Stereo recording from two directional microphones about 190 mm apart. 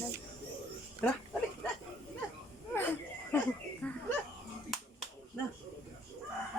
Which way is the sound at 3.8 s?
5° left (ahead or behind).